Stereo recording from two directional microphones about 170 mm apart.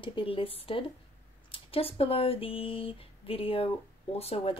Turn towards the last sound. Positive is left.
turn(degrees=35)  # may be behind; listen again after turning